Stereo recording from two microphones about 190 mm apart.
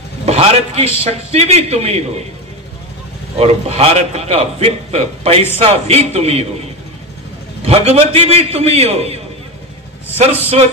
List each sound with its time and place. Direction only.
0.2 s a man's voice: 35° right (ahead or behind)
3.3 s a man's voice: 30° right (ahead or behind)
7.6 s a man's voice: 30° right (ahead or behind)